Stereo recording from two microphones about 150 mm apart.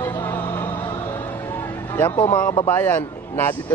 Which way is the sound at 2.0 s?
15° left (ahead or behind).